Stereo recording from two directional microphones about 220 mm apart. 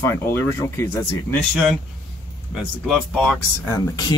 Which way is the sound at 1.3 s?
Centre (ahead or behind).